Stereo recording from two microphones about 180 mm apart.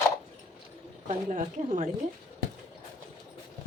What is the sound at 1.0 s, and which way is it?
Speech, 45° right (ahead or behind).